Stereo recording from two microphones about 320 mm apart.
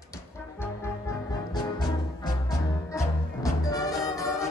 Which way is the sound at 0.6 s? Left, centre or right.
Centre.